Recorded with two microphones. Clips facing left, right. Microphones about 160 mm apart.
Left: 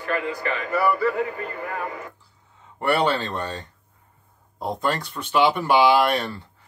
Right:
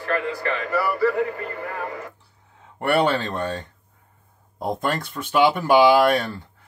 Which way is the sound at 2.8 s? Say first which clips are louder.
Right 1 dB; 55° right (ahead or behind).